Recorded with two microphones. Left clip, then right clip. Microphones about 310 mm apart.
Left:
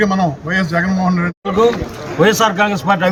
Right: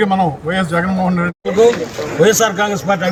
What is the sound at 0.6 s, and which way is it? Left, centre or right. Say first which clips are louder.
Speech: right 2 dB; centre.